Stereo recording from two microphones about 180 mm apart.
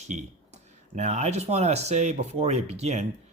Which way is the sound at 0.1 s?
40° right (ahead or behind).